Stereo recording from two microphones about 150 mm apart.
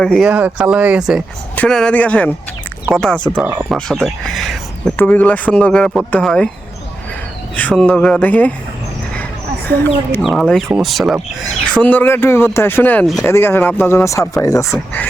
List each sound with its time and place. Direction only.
0.0 s speech: 5° left (ahead or behind)
0.3 s speech: 10° right (ahead or behind)
3.4 s speech: 10° right (ahead or behind)
3.8 s speech: 5° left (ahead or behind)
5.0 s speech: 10° left (ahead or behind)
7.5 s speech: 10° left (ahead or behind)
9.6 s speech: 15° left (ahead or behind)
10.2 s speech: centre (ahead or behind)
11.7 s speech: 10° left (ahead or behind)